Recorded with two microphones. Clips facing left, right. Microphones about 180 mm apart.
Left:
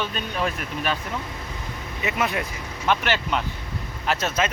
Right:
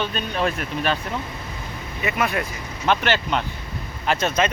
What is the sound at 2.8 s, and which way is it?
Speech, 5° left (ahead or behind).